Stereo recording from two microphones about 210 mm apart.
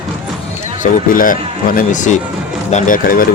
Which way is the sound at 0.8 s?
40° left (ahead or behind).